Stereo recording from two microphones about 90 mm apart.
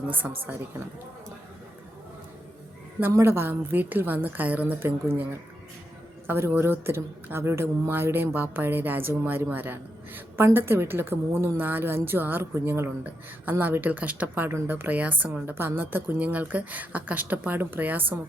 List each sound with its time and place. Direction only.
0.1 s a woman's voice: 20° right (ahead or behind)
3.1 s a woman's voice: 30° right (ahead or behind)